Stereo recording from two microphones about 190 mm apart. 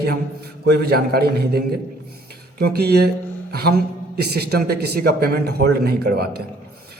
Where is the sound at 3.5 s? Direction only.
55° right (ahead or behind).